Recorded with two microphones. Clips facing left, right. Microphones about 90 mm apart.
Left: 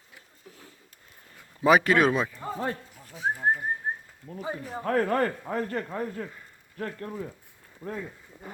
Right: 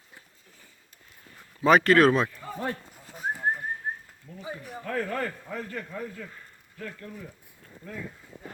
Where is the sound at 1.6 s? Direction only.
5° left (ahead or behind).